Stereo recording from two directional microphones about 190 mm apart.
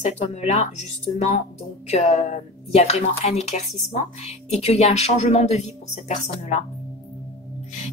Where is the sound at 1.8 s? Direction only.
35° left (ahead or behind).